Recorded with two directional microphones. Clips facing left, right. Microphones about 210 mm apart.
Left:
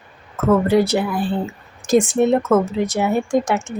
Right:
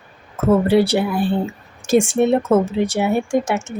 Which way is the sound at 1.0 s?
25° right (ahead or behind).